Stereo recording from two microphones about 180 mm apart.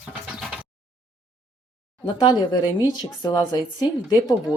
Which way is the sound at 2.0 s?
25° left (ahead or behind).